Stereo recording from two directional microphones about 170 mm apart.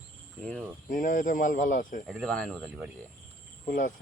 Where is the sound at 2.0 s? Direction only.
Centre (ahead or behind).